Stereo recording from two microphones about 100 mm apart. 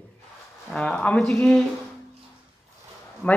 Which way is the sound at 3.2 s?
10° left (ahead or behind).